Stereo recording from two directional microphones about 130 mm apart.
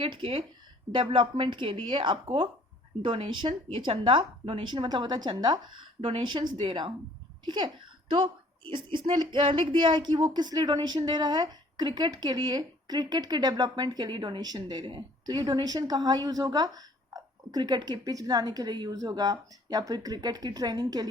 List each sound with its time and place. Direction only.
0.0 s speech: 45° right (ahead or behind)
4.9 s a child's voice: 35° right (ahead or behind)